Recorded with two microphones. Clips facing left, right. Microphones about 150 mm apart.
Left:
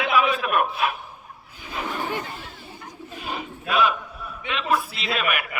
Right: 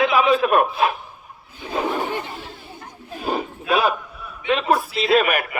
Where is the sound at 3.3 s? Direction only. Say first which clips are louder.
Right 8 dB; 40° right (ahead or behind).